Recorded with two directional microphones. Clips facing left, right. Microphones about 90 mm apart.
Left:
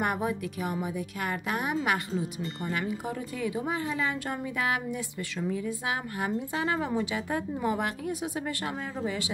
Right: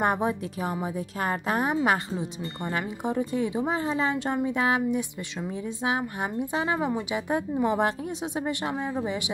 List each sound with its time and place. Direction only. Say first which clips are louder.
0.0 s a woman's voice: right 4 dB; 30° right (ahead or behind)